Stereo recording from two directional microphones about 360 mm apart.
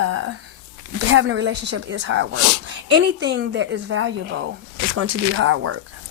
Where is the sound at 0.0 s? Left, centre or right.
Right.